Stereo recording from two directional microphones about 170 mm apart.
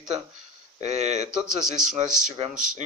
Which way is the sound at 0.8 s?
40° right (ahead or behind).